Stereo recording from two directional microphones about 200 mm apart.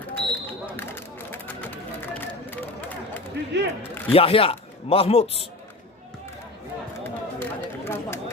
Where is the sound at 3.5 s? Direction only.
60° right (ahead or behind).